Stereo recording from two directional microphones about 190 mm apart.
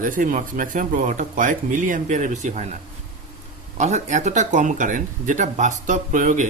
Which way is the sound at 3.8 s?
40° right (ahead or behind).